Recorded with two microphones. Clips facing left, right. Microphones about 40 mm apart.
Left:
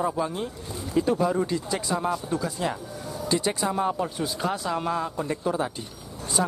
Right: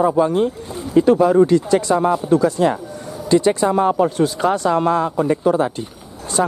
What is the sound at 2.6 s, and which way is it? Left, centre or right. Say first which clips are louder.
Speech: right 11 dB; right.